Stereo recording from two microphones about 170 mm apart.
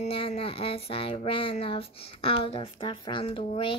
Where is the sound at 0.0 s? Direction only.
35° left (ahead or behind).